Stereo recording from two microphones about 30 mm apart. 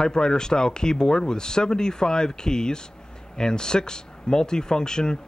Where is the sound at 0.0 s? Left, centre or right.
Left.